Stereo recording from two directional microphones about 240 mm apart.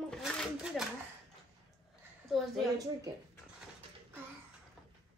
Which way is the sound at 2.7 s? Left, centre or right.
Centre.